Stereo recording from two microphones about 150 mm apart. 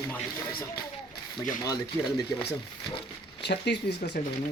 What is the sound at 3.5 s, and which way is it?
Speech, 90° left.